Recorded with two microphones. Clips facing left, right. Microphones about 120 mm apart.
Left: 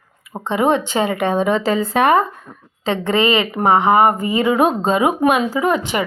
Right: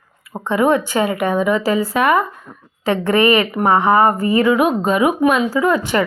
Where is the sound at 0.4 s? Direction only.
20° left (ahead or behind).